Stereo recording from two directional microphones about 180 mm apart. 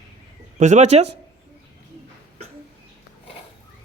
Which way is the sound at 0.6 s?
40° right (ahead or behind).